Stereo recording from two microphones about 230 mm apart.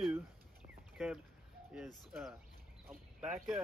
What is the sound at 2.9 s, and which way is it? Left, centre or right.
Speech, centre.